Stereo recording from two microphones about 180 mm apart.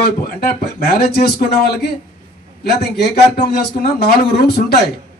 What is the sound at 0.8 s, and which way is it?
A man's voice, 60° left (ahead or behind).